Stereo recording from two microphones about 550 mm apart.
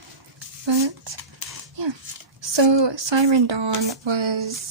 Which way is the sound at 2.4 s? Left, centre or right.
Right.